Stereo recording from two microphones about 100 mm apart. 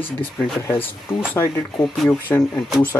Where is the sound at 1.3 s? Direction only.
25° left (ahead or behind).